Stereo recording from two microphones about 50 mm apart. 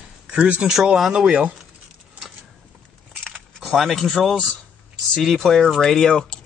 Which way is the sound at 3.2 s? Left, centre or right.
Centre.